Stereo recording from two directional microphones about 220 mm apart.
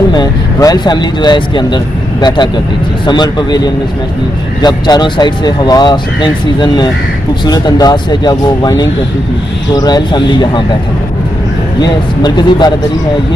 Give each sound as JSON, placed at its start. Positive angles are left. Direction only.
{"t": 0.1, "sound": "speech", "side_deg": 15}
{"t": 4.6, "sound": "speech", "side_deg": 20}
{"t": 11.8, "sound": "speech", "side_deg": 20}